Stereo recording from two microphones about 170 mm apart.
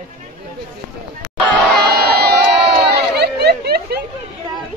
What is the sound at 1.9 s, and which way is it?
Crowd, 70° right (ahead or behind).